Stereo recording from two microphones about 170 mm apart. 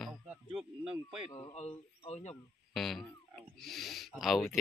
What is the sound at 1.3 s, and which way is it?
Speech, 35° left (ahead or behind).